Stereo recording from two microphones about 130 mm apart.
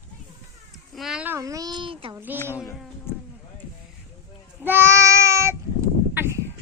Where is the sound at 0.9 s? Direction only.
5° right (ahead or behind).